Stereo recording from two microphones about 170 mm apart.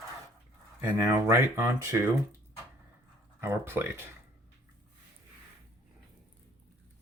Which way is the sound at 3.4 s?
15° right (ahead or behind).